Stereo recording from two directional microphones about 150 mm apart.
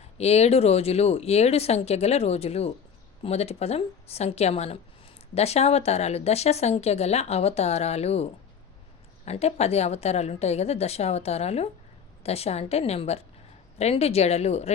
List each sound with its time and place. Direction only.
0.2 s speech: 45° left (ahead or behind)